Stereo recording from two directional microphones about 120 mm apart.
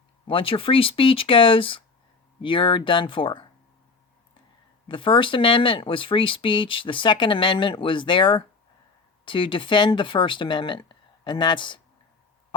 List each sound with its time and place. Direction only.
0.3 s speech: 50° left (ahead or behind)
4.9 s speech: 45° left (ahead or behind)